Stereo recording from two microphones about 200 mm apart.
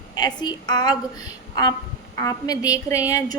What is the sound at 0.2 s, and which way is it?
Speech, 20° left (ahead or behind).